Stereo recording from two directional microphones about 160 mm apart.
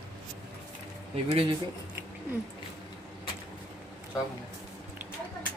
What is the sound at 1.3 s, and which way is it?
Speech, 35° right (ahead or behind).